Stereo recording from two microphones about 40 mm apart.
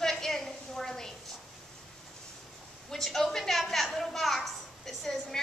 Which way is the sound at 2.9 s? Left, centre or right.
Centre.